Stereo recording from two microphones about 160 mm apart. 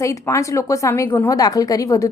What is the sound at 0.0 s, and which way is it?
A woman's voice, 20° left (ahead or behind).